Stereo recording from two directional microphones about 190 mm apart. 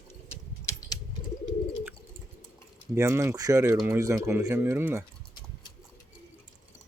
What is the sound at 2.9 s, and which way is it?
Speech, 15° right (ahead or behind).